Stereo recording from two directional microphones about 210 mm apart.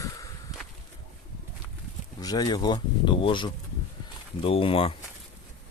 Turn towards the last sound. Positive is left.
turn(degrees=25)  # may be behind; listen again after turning